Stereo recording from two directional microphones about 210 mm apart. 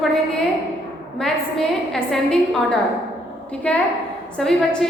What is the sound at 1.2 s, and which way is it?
A woman's voice, centre (ahead or behind).